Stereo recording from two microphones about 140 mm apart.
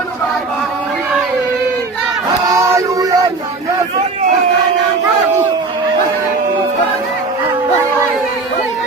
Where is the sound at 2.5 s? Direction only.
25° right (ahead or behind).